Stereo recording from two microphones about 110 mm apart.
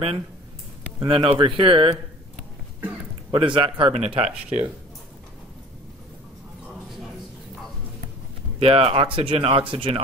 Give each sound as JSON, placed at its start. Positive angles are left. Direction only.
{"t": 0.9, "sound": "speech", "side_deg": -55}
{"t": 3.3, "sound": "speech", "side_deg": -50}
{"t": 3.9, "sound": "speech", "side_deg": -75}
{"t": 8.5, "sound": "speech", "side_deg": -60}